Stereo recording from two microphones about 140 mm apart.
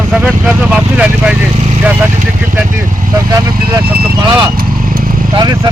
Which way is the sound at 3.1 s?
25° right (ahead or behind).